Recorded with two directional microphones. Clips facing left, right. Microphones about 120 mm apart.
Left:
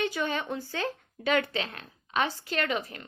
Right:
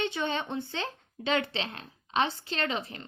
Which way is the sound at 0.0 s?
25° right (ahead or behind).